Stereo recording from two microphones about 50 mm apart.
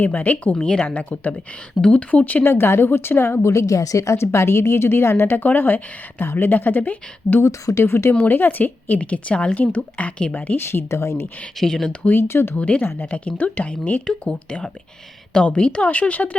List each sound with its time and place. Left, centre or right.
0.0 s a woman's voice: left
0.5 s a woman's voice: centre
2.4 s a woman's voice: left
5.4 s a woman's voice: left
7.4 s speech: left
7.9 s speech: left
8.2 s a woman's voice: left
10.7 s a woman's voice: left
11.6 s a woman's voice: centre
12.1 s speech: left
12.5 s speech: left
15.4 s speech: left